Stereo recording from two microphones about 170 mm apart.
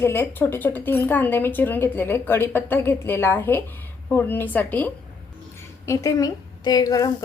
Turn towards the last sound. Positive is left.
turn(degrees=20)  # may be behind; listen again after turning